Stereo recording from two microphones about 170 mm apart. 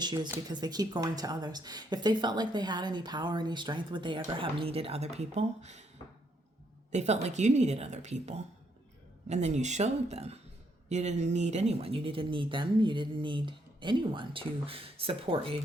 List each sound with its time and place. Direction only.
0.0 s a woman's voice: 25° right (ahead or behind); by 5.8 s 40° right (ahead or behind)
6.9 s speech: 40° right (ahead or behind)